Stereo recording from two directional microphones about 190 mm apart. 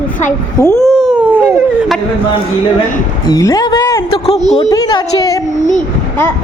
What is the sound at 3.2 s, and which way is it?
A woman's voice, 20° left (ahead or behind).